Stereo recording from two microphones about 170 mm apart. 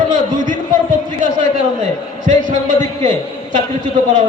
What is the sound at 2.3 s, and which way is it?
Speech, 50° right (ahead or behind).